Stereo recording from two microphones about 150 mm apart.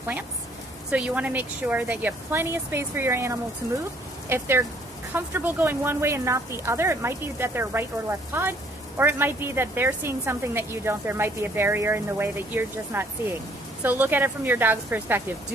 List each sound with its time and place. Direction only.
0.9 s speech: 10° right (ahead or behind)